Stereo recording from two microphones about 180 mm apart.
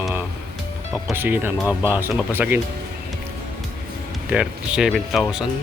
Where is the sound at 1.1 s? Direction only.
10° right (ahead or behind).